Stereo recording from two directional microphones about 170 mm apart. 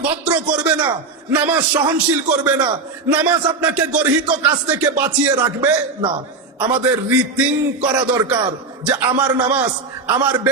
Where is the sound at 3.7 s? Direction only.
10° right (ahead or behind).